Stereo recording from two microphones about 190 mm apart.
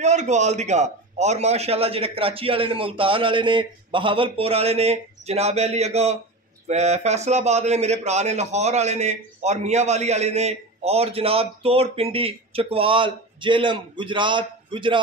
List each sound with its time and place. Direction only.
0.0 s a man's voice: 40° right (ahead or behind)